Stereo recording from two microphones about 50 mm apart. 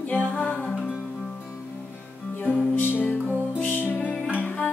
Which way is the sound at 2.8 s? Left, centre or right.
Left.